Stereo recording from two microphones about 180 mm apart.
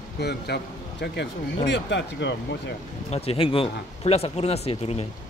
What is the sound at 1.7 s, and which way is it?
Speech, 80° left.